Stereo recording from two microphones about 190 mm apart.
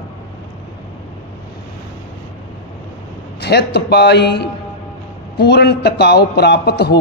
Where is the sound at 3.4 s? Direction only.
60° left (ahead or behind).